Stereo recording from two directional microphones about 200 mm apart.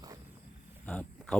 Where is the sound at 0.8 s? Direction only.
5° left (ahead or behind).